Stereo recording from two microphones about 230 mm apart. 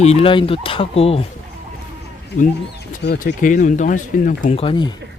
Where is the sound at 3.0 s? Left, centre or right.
Left; by 5.0 s centre.